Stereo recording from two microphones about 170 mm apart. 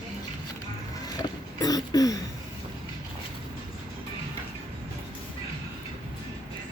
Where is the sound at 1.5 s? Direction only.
20° left (ahead or behind).